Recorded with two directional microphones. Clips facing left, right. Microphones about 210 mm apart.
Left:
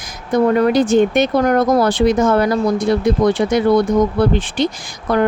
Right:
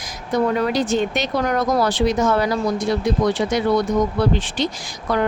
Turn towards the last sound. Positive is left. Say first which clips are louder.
# left 5 dB
turn(degrees=55)  # may be behind; listen again after turning